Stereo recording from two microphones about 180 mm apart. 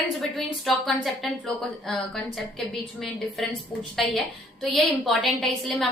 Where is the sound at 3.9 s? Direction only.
Centre (ahead or behind).